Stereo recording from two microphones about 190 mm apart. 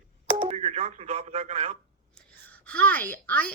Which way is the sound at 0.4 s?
35° right (ahead or behind).